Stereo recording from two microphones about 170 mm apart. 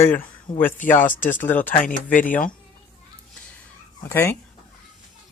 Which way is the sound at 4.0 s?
10° left (ahead or behind).